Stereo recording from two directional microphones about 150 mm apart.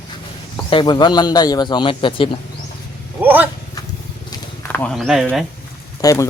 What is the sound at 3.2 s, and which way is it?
Speech, 10° right (ahead or behind).